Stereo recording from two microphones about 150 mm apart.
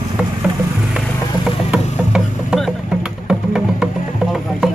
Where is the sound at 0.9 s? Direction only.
5° right (ahead or behind).